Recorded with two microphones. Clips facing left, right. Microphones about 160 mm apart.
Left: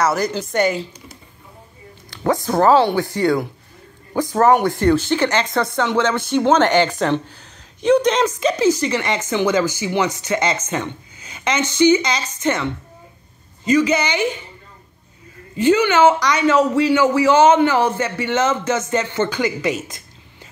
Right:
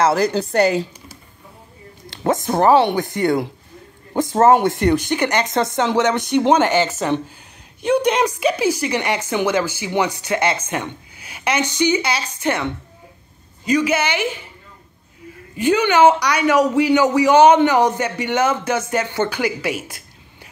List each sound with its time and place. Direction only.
0.1 s a woman's voice: 35° right (ahead or behind)
2.0 s speech: 20° right (ahead or behind)
13.7 s speech: 10° right (ahead or behind)
15.6 s speech: 15° right (ahead or behind)